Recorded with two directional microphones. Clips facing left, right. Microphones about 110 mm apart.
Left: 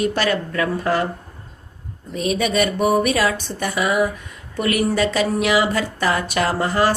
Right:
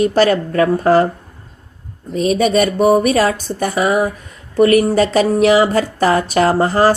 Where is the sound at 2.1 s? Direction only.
40° right (ahead or behind).